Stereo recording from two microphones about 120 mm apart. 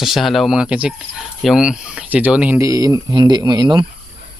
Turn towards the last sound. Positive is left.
turn(degrees=-40)  # may be behind; listen again after turning